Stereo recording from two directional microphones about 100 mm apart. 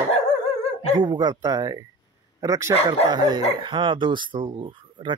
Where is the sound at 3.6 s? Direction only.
55° right (ahead or behind).